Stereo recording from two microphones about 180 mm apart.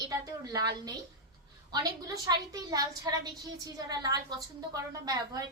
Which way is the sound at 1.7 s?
20° right (ahead or behind).